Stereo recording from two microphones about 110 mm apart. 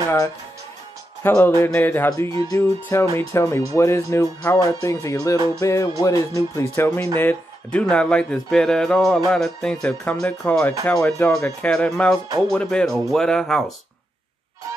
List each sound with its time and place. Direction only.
1.2 s speech: 20° left (ahead or behind)
2.0 s speech: 35° left (ahead or behind)
7.2 s speech: 15° left (ahead or behind)